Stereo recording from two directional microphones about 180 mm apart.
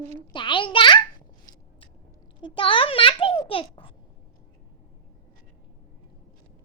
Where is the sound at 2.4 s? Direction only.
30° left (ahead or behind).